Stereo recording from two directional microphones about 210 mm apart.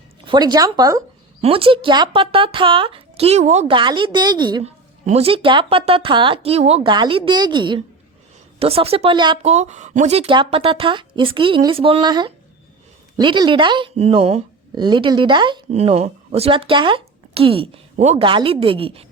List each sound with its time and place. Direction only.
0.3 s a woman's voice: 20° right (ahead or behind)
1.4 s a woman's voice: 25° right (ahead or behind)